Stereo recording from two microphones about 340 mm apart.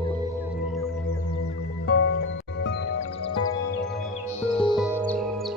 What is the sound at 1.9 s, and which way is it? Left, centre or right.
Music, left.